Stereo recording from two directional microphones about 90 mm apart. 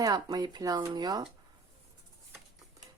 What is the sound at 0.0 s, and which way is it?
Speech, 45° right (ahead or behind).